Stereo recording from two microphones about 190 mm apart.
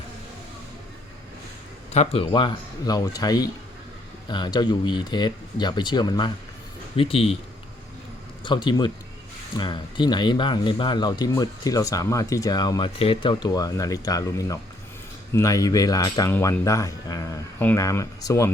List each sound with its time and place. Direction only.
1.9 s speech: 30° left (ahead or behind)
8.4 s speech: 25° left (ahead or behind)